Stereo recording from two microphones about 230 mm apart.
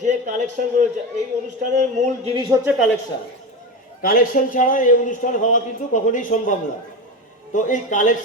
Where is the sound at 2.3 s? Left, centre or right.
Centre.